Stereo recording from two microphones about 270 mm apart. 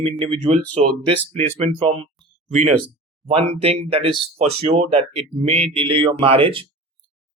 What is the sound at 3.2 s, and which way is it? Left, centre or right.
Speech, right.